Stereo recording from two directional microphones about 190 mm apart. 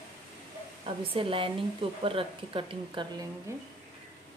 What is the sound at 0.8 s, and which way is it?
Speech, 30° right (ahead or behind).